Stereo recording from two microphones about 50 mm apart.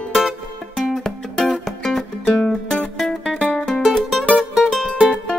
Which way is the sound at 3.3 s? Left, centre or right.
Centre.